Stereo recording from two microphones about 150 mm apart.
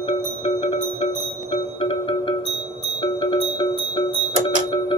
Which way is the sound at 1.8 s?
35° left (ahead or behind).